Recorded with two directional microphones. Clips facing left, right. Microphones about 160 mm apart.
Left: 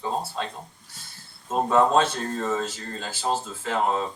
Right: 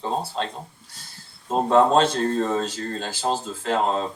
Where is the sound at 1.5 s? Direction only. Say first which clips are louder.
Right 3 dB; 30° right (ahead or behind).